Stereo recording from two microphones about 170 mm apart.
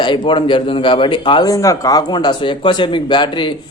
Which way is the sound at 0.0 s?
30° left (ahead or behind).